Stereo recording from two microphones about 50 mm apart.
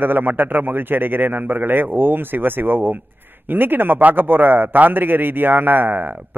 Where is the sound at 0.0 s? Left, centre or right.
Right.